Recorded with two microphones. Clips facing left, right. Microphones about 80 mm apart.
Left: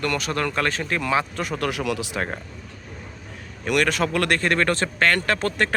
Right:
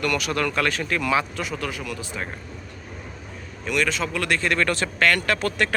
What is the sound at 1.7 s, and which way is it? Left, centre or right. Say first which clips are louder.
Speech: left 6 dB; left.